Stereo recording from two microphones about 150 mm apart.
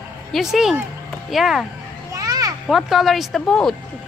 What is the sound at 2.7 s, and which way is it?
Speech, centre (ahead or behind).